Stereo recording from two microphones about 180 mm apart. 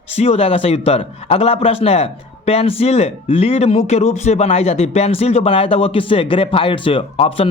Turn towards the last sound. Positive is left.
turn(degrees=30)  # may be behind; listen again after turning